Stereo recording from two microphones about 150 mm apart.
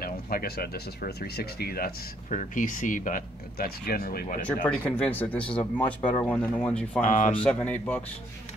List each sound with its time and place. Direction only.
0.0 s speech: 80° left
2.2 s speech: 60° left (ahead or behind); by 4.4 s 90° left
4.6 s speech: 10° left (ahead or behind)
7.0 s speech: 55° left (ahead or behind)
7.4 s speech: 10° left (ahead or behind)